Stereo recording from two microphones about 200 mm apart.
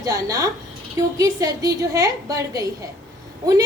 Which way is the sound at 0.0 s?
15° right (ahead or behind).